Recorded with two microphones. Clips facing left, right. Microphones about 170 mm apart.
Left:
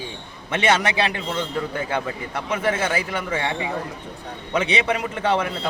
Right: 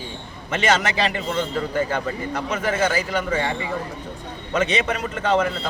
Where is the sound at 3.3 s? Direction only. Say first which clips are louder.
Right 2 dB; 10° left (ahead or behind).